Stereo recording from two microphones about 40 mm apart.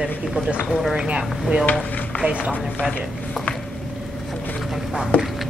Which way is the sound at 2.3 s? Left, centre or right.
Right.